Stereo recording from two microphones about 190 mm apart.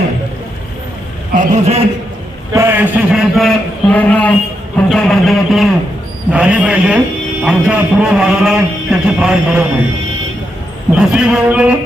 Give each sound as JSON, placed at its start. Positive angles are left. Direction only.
{"t": 1.3, "sound": "a man's voice", "side_deg": -40}
{"t": 2.5, "sound": "a man's voice", "side_deg": -15}
{"t": 10.9, "sound": "a man's voice", "side_deg": -5}